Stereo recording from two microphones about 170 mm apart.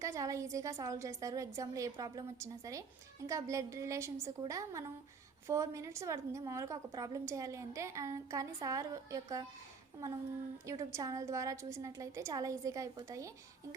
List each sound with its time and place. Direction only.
0.0 s a woman's voice: 20° right (ahead or behind)